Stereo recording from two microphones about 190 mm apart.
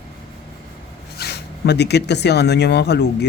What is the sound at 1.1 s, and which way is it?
Speech, 60° left (ahead or behind).